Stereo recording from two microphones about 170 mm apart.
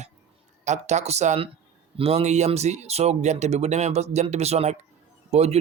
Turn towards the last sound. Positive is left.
turn(degrees=-40)  # may be behind; listen again after turning